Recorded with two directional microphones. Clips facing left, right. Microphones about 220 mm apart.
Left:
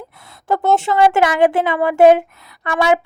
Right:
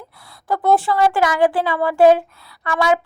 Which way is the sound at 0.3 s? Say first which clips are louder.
Left 3 dB; 25° left (ahead or behind).